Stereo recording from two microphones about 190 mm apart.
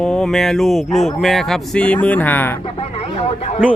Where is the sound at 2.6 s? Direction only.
30° left (ahead or behind).